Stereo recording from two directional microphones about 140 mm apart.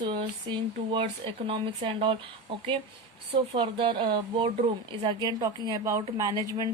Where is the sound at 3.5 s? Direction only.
40° right (ahead or behind).